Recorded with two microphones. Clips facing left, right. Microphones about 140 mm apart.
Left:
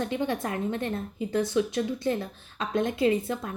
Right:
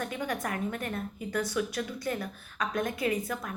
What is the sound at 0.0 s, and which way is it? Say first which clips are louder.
A woman's voice: left 5 dB; 25° left (ahead or behind).